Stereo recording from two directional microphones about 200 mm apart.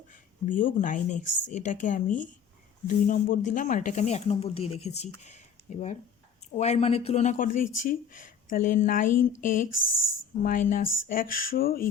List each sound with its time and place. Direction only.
0.4 s speech: 40° left (ahead or behind)